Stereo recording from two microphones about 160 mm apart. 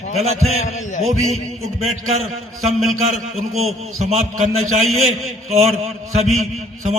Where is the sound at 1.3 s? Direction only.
40° right (ahead or behind).